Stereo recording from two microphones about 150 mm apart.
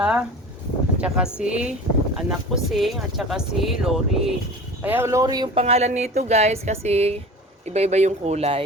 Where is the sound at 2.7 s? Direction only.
Centre (ahead or behind).